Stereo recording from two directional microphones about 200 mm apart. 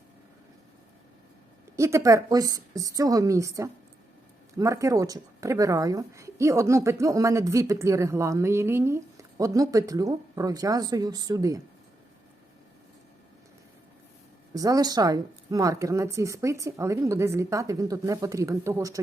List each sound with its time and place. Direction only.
1.7 s speech: 15° right (ahead or behind)
14.5 s speech: 15° right (ahead or behind)